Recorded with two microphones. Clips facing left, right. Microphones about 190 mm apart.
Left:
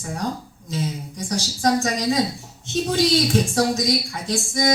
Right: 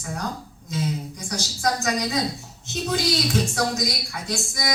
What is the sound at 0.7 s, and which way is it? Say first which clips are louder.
A woman's voice: even; 30° left (ahead or behind).